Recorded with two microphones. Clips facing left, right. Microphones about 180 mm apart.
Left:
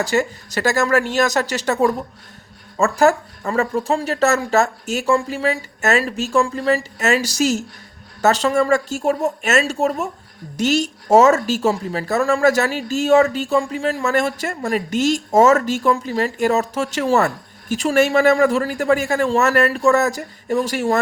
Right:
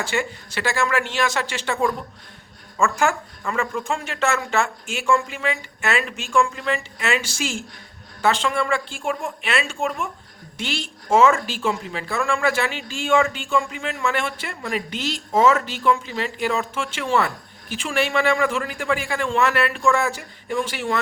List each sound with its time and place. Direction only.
0.0 s speech: 40° left (ahead or behind)